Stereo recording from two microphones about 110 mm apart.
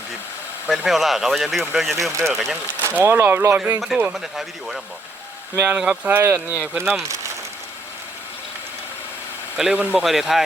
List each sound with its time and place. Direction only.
0.9 s speech: centre (ahead or behind)
2.8 s speech: 20° right (ahead or behind)
3.6 s speech: 5° right (ahead or behind)
6.1 s speech: 20° right (ahead or behind)
9.6 s speech: 5° right (ahead or behind)